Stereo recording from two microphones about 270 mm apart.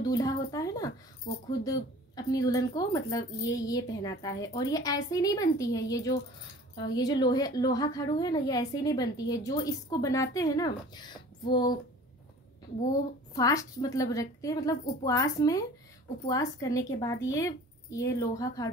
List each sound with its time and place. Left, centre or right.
0.0 s a woman's voice: centre
13.3 s a woman's voice: centre